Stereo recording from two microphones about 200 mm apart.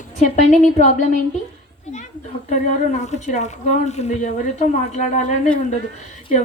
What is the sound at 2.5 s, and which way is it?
Speech, 35° left (ahead or behind).